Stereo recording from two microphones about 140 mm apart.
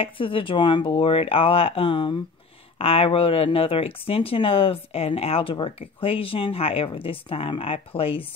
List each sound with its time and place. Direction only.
0.0 s speech: 40° left (ahead or behind)